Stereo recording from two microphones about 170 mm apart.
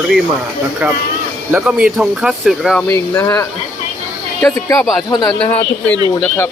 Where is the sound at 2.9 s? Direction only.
15° left (ahead or behind).